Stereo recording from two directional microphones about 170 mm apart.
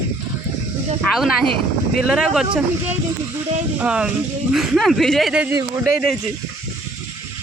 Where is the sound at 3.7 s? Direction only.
5° right (ahead or behind).